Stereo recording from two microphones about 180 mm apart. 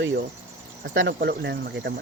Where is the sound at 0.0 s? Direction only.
90° right.